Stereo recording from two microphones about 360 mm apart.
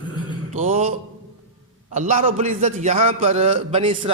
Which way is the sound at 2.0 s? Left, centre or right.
Centre.